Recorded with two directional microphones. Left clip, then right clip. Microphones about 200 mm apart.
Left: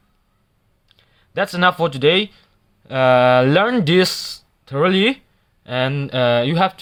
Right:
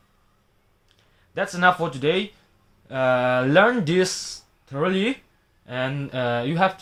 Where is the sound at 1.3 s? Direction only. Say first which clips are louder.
Left 3 dB; 45° left (ahead or behind).